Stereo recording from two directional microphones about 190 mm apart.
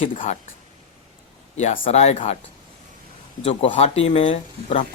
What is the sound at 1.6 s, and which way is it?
Speech, 35° left (ahead or behind).